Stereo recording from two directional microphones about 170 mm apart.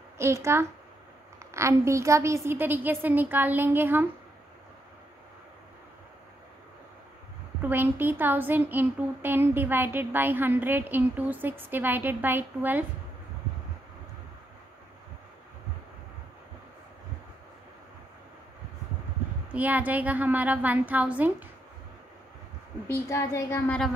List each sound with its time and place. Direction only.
0.2 s a woman's voice: 15° right (ahead or behind)
7.6 s a woman's voice: 10° right (ahead or behind)
19.5 s a woman's voice: 10° right (ahead or behind)
23.0 s speech: 15° left (ahead or behind)